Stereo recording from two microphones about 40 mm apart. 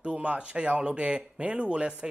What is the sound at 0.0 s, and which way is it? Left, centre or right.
A man's voice, right.